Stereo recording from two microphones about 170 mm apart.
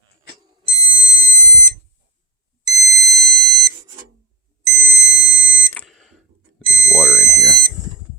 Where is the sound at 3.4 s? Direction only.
20° right (ahead or behind).